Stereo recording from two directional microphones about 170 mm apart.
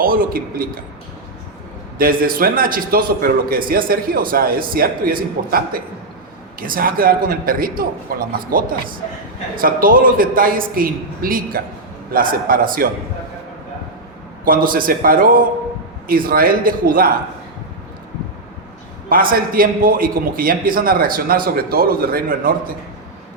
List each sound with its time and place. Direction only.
0.0 s a man's voice: 60° right (ahead or behind)
2.0 s a man's voice: 60° right (ahead or behind)
14.4 s a man's voice: 55° right (ahead or behind)
19.0 s a man's voice: 55° right (ahead or behind)